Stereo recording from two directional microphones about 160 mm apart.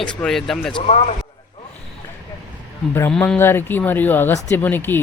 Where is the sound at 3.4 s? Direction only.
15° left (ahead or behind).